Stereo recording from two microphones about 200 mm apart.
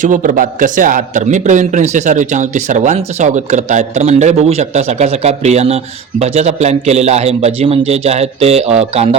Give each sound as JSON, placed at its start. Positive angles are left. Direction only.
{"t": 0.0, "sound": "a man's voice", "side_deg": -40}